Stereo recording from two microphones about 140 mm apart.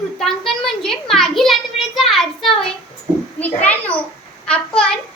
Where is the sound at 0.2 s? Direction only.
Centre (ahead or behind).